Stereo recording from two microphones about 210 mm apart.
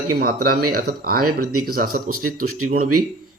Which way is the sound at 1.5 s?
90° right.